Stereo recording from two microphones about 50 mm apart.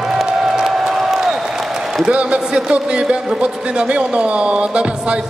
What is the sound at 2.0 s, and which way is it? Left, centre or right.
A man's voice, right.